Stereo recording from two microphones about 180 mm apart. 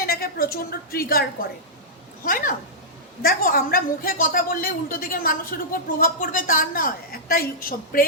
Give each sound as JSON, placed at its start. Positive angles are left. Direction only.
{"t": 0.0, "sound": "a woman's voice", "side_deg": 55}
{"t": 2.2, "sound": "a woman's voice", "side_deg": 50}